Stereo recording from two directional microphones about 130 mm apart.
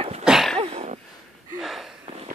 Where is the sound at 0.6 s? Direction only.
50° right (ahead or behind).